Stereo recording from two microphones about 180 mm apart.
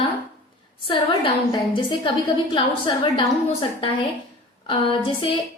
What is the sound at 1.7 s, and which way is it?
A woman's voice, 25° left (ahead or behind).